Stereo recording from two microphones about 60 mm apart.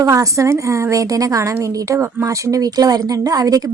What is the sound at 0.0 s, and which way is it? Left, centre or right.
Speech, right.